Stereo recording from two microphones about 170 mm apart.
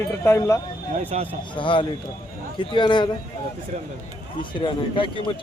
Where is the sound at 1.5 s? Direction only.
30° left (ahead or behind).